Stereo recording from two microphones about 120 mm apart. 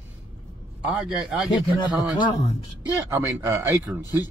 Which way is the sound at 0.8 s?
5° right (ahead or behind).